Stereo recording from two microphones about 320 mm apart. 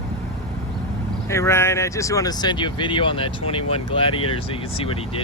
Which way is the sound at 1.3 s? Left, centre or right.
Centre.